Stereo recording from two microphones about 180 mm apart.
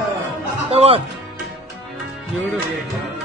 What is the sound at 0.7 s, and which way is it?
Music, 35° right (ahead or behind).